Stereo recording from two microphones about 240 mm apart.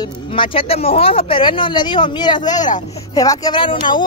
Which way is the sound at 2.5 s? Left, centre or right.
Left.